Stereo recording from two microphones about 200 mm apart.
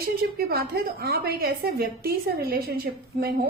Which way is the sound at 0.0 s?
50° right (ahead or behind).